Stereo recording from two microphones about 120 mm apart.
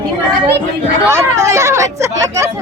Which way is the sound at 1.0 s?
20° right (ahead or behind).